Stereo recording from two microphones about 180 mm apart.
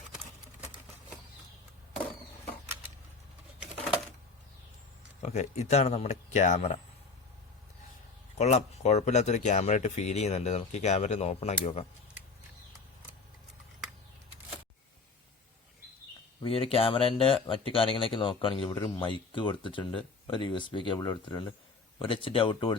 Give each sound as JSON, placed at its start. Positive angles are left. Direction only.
{"t": 5.2, "sound": "speech", "side_deg": 40}
{"t": 8.4, "sound": "speech", "side_deg": 40}
{"t": 16.4, "sound": "speech", "side_deg": 30}